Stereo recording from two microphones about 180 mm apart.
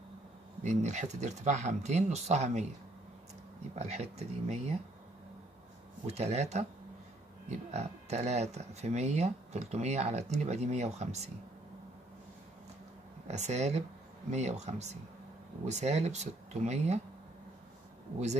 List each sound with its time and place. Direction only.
0.7 s speech: 40° right (ahead or behind)
3.7 s speech: 35° right (ahead or behind)
6.0 s speech: 35° right (ahead or behind)
13.3 s speech: 40° right (ahead or behind)